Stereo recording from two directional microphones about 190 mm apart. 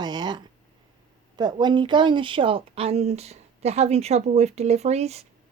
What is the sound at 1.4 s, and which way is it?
Speech, 20° right (ahead or behind).